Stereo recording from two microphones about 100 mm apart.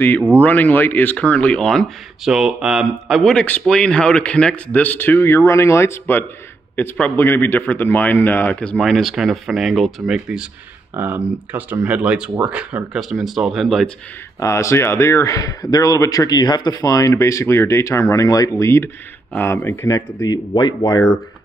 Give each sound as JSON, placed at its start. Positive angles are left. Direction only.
{"t": 0.4, "sound": "speech", "side_deg": 15}
{"t": 2.2, "sound": "speech", "side_deg": -5}
{"t": 3.3, "sound": "speech", "side_deg": 15}
{"t": 11.0, "sound": "speech", "side_deg": -20}
{"t": 14.4, "sound": "a man's voice", "side_deg": 30}
{"t": 19.9, "sound": "speech", "side_deg": 40}